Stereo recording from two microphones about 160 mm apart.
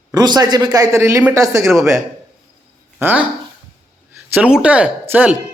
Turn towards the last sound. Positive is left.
turn(degrees=-10)  # may be behind; listen again after turning